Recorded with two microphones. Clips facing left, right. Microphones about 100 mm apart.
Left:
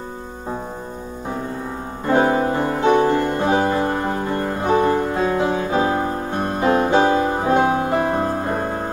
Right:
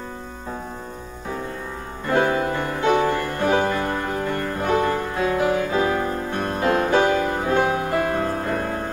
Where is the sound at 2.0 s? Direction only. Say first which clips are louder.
Left 3 dB; 30° left (ahead or behind).